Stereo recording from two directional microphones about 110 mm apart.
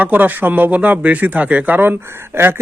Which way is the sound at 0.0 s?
15° right (ahead or behind).